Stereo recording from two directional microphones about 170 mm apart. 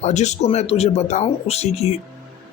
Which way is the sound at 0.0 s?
40° left (ahead or behind).